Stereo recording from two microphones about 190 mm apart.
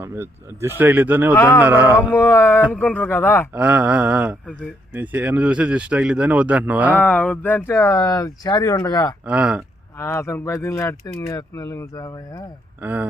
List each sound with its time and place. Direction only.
0.0 s speech: 15° right (ahead or behind)
2.1 s speech: 10° left (ahead or behind)
3.5 s speech: 10° right (ahead or behind)
7.0 s speech: 10° left (ahead or behind)
9.2 s speech: 5° right (ahead or behind)
10.0 s speech: 15° left (ahead or behind)
12.8 s speech: 10° right (ahead or behind)